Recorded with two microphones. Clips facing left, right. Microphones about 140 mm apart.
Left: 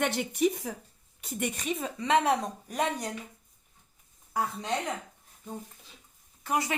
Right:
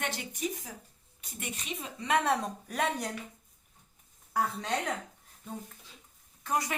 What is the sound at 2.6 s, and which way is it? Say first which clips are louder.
Speech: left 1 dB; 5° left (ahead or behind).